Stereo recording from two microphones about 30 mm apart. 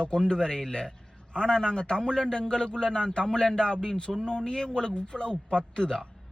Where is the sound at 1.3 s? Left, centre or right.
Left.